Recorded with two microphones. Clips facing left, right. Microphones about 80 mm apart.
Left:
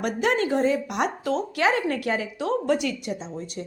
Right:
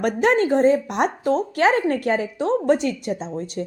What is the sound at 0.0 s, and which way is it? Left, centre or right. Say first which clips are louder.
A woman's voice: right 5 dB; right.